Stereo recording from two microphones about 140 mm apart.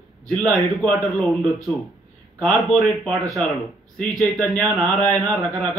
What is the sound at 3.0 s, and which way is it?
A man's voice, centre (ahead or behind).